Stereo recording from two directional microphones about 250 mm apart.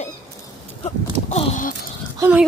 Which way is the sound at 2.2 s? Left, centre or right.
Centre.